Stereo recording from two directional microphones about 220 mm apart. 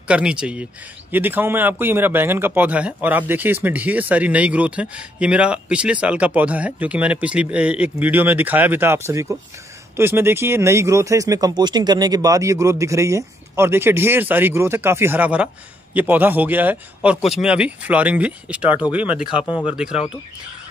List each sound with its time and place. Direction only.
0.1 s a man's voice: 5° right (ahead or behind)
19.3 s speech: 25° left (ahead or behind)